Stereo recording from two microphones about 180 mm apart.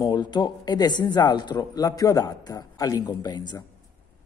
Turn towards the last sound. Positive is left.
turn(degrees=25)  # may be behind; listen again after turning